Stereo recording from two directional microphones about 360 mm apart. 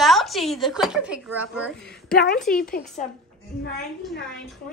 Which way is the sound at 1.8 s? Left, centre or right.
Left.